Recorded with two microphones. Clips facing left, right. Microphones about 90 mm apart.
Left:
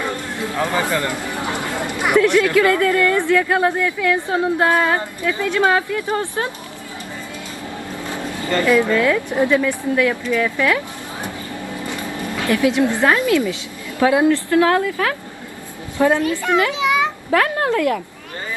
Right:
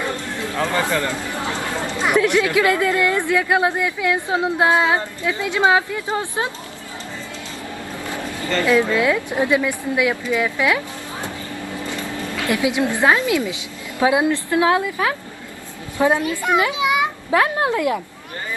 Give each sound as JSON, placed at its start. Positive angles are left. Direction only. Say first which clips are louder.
{"t": 0.5, "sound": "speech", "louder": "even", "side_deg": 15}
{"t": 2.1, "sound": "a woman's voice", "louder": "left 3 dB", "side_deg": -15}
{"t": 8.1, "sound": "vehicle", "louder": "left 2 dB", "side_deg": 20}
{"t": 8.6, "sound": "a woman's voice", "louder": "left 1 dB", "side_deg": -15}
{"t": 12.4, "sound": "a woman's voice", "louder": "left 3 dB", "side_deg": -20}